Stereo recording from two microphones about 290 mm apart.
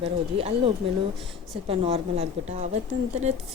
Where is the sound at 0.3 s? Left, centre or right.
Centre.